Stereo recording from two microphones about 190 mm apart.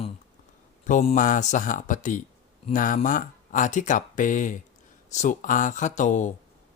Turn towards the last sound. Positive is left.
turn(degrees=40)  # may be behind; listen again after turning